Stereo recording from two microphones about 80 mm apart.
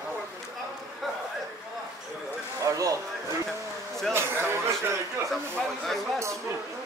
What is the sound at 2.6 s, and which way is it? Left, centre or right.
Speech, right.